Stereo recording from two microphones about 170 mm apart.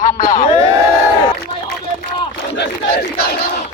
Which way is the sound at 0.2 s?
50° left (ahead or behind).